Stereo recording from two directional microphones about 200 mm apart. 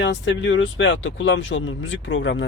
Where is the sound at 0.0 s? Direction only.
65° left (ahead or behind).